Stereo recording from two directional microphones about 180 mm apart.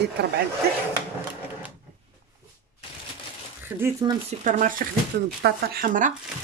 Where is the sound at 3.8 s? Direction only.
15° right (ahead or behind).